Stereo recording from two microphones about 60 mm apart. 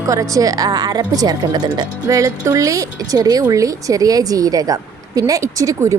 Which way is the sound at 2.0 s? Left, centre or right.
Right.